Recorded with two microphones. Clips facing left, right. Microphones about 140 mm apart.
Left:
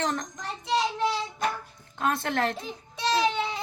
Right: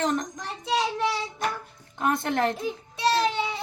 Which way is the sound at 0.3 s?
Centre (ahead or behind).